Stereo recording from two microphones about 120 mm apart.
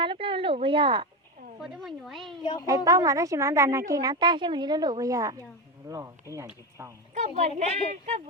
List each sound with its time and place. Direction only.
0.0 s speech: 45° right (ahead or behind)
1.6 s speech: 5° right (ahead or behind)
2.4 s speech: 40° left (ahead or behind)
2.6 s speech: 30° right (ahead or behind)
7.1 s a woman's voice: 75° right (ahead or behind)